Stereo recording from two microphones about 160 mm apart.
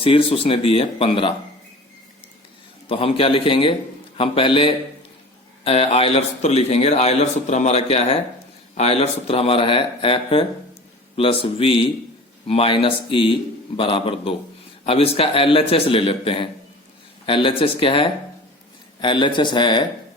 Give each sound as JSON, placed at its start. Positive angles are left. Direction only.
{"t": 0.0, "sound": "a man's voice", "side_deg": 35}
{"t": 2.9, "sound": "a man's voice", "side_deg": 35}